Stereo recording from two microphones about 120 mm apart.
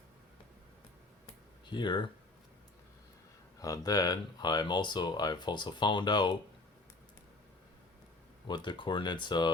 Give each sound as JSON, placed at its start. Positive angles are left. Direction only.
{"t": 1.7, "sound": "speech", "side_deg": 40}
{"t": 3.6, "sound": "speech", "side_deg": 30}
{"t": 8.4, "sound": "speech", "side_deg": 40}